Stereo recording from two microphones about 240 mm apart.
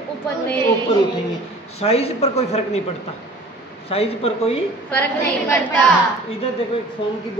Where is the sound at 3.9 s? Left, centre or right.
Left.